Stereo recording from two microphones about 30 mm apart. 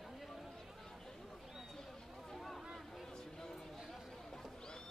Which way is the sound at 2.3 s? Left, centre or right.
Centre.